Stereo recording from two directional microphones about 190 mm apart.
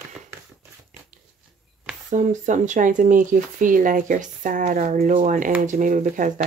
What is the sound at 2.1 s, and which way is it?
Speech, 40° right (ahead or behind).